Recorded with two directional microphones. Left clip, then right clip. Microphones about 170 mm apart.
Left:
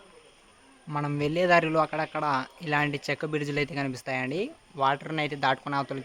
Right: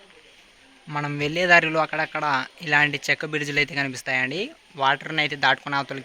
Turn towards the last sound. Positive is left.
turn(degrees=5)  # may be behind; listen again after turning